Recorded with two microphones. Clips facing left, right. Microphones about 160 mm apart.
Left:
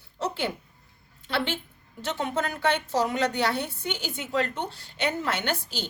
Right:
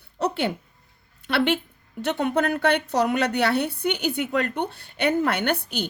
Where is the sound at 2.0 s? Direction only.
60° right (ahead or behind).